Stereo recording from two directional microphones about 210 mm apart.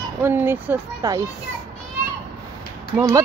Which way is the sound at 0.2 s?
10° right (ahead or behind).